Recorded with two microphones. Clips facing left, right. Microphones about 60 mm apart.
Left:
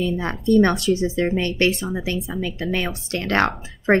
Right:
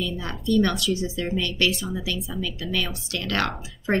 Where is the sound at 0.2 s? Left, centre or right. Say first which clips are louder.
Left 5 dB; left.